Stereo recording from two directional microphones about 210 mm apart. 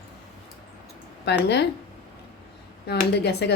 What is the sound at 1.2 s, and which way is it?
Speech, 55° left (ahead or behind).